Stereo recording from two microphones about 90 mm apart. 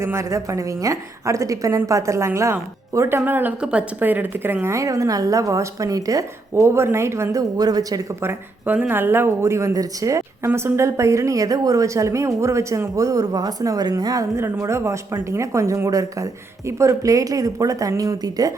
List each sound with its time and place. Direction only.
0.0 s speech: 30° right (ahead or behind)
7.6 s speech: 45° right (ahead or behind)
8.2 s speech: 25° right (ahead or behind); by 14.3 s 45° right (ahead or behind)
14.3 s speech: 25° right (ahead or behind); by 18.5 s 40° right (ahead or behind)